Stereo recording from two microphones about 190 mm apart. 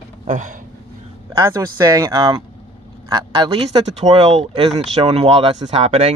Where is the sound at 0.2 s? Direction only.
40° right (ahead or behind).